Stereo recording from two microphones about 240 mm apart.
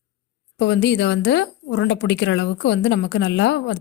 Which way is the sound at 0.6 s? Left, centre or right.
Left.